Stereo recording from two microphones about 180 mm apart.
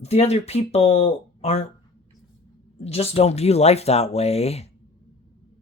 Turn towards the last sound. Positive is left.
turn(degrees=35)  # may be behind; listen again after turning